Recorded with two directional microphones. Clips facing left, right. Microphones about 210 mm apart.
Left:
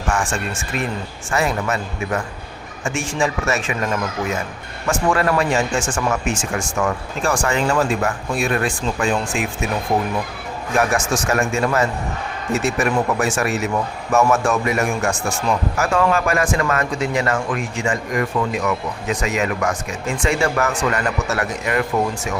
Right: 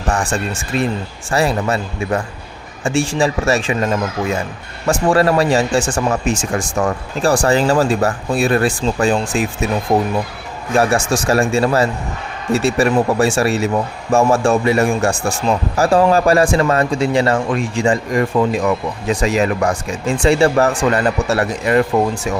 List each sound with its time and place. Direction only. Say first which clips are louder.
0.1 s a man's voice: right 3 dB; 35° right (ahead or behind)